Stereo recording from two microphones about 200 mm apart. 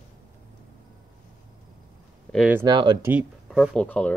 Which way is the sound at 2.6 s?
20° right (ahead or behind).